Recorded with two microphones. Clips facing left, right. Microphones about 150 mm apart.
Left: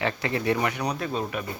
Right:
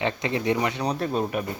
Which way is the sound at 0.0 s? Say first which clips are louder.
Right 1 dB; 20° right (ahead or behind).